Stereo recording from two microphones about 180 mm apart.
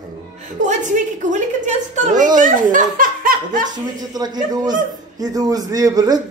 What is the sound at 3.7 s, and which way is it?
A man's voice, 20° right (ahead or behind).